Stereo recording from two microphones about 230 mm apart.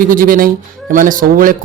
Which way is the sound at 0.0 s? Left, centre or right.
Right.